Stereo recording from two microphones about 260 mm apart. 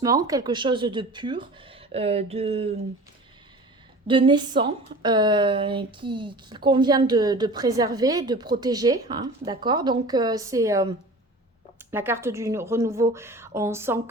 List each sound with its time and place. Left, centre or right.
0.0 s speech: centre
4.0 s a woman's voice: centre